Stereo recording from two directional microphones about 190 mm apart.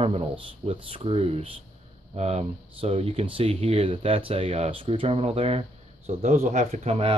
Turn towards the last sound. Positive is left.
turn(degrees=-30)  # may be behind; listen again after turning